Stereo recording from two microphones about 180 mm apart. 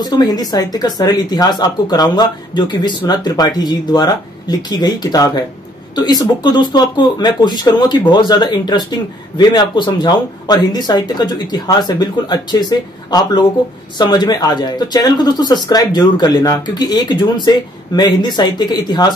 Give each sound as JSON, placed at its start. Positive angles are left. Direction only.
{"t": 0.0, "sound": "speech", "side_deg": 20}